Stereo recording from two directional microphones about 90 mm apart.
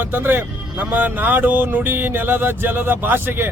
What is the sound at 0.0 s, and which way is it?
Speech, 20° right (ahead or behind).